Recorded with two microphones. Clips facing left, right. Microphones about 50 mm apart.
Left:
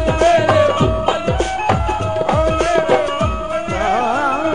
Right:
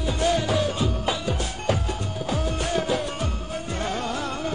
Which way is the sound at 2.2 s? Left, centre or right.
Left.